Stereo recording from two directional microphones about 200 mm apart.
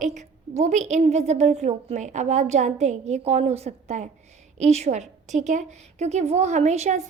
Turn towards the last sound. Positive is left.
turn(degrees=-35)  # may be behind; listen again after turning